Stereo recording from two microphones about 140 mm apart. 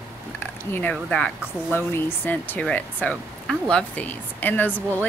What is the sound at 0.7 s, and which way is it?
Speech, 10° left (ahead or behind).